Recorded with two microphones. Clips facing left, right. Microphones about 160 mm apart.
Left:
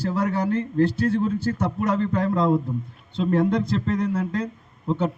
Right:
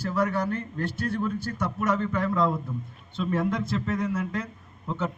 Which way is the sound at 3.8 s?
35° left (ahead or behind).